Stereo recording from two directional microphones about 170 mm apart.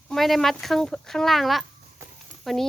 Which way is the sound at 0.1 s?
Centre (ahead or behind).